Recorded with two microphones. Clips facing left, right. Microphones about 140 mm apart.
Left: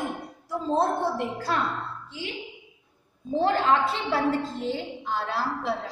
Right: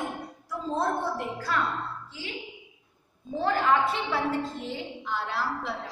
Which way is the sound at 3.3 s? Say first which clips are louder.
Left 2 dB; 30° left (ahead or behind).